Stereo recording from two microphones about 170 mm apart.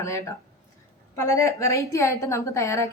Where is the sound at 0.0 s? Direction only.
15° left (ahead or behind).